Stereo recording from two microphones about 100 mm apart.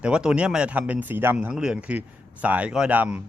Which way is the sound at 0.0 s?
10° right (ahead or behind).